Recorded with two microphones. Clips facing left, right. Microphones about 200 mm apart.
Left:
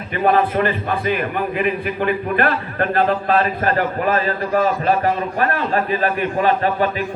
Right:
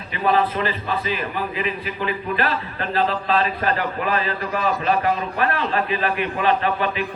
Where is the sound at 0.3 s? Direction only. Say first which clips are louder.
Left 3 dB; 55° left (ahead or behind).